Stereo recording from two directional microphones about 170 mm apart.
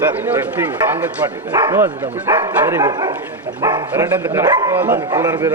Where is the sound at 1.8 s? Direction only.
15° right (ahead or behind).